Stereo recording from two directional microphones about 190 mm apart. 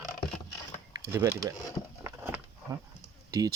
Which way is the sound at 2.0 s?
15° right (ahead or behind).